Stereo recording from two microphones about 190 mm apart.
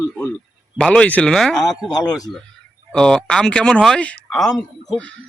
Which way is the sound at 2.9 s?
5° left (ahead or behind).